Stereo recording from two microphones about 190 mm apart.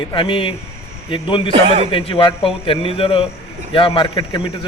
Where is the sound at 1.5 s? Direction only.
30° right (ahead or behind).